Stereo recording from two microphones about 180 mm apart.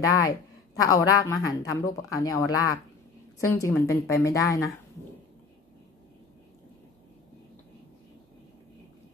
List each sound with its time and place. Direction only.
0.0 s a woman's voice: 20° left (ahead or behind)